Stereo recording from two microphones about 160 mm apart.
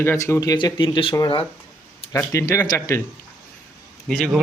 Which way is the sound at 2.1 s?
15° left (ahead or behind).